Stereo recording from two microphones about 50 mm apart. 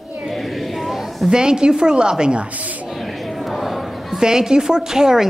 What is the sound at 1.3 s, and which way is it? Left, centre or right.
Speech, centre.